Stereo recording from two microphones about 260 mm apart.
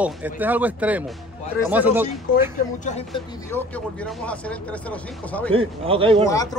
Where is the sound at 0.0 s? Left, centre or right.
Centre.